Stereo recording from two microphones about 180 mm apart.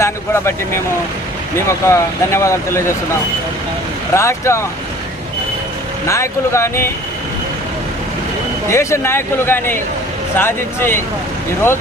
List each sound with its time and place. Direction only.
0.0 s speech: 15° left (ahead or behind)
4.1 s speech: 15° left (ahead or behind)
6.1 s speech: 15° left (ahead or behind)
8.7 s speech: 15° left (ahead or behind)